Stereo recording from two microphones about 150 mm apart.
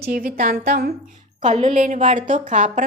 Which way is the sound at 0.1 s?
75° right (ahead or behind).